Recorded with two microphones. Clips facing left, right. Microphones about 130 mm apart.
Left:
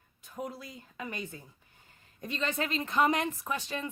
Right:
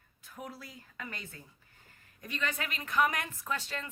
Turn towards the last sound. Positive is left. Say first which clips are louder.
# left 2 dB
turn(degrees=15)  # may be behind; listen again after turning